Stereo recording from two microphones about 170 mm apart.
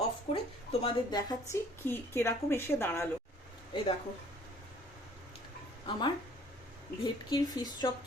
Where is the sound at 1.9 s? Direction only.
15° left (ahead or behind).